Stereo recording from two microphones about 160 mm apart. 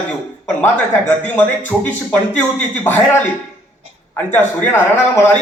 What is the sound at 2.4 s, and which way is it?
Speech, 10° left (ahead or behind).